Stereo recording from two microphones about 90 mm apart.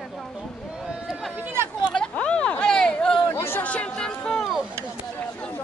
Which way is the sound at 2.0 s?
10° left (ahead or behind).